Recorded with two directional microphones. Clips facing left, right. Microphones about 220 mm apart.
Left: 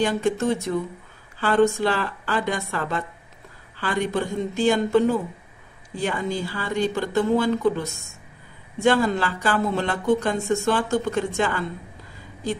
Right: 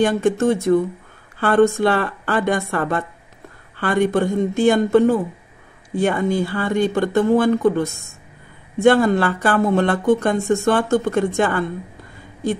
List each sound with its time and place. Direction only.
0.0 s speech: 50° right (ahead or behind)